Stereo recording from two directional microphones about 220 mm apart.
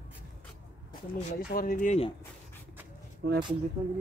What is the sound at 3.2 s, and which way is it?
Speech, 50° right (ahead or behind).